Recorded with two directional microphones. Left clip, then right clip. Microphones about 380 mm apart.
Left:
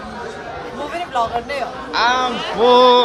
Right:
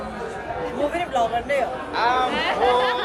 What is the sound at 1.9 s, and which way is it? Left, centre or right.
Speech, left.